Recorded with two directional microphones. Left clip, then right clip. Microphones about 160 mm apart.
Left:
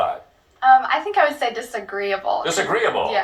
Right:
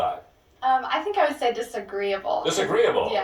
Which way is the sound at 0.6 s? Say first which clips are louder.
Left 8 dB; 10° right (ahead or behind).